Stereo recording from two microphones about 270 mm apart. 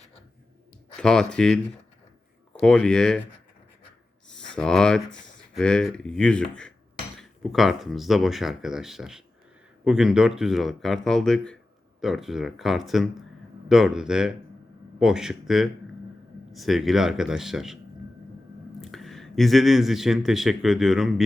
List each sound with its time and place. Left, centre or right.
0.9 s speech: centre
4.3 s a sound: centre
5.5 s speech: centre
18.8 s speech: centre